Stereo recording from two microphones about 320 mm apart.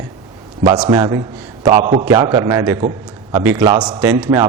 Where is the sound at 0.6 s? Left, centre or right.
Centre.